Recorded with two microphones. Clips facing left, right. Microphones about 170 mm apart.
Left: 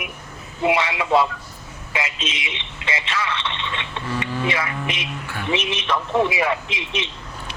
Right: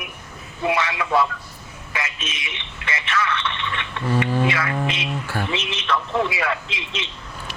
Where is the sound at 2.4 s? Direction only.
25° left (ahead or behind).